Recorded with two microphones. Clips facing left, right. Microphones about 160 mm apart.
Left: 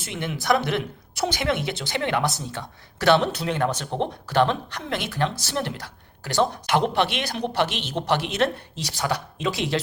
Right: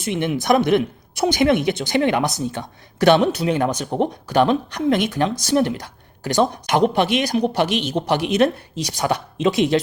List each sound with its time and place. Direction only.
0.0 s speech: 20° right (ahead or behind)